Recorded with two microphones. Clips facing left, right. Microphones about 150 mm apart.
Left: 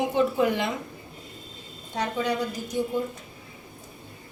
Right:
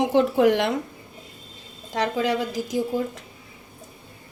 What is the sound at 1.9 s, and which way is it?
A woman's voice, 90° right.